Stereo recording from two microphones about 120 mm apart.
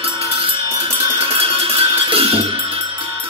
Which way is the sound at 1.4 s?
50° right (ahead or behind).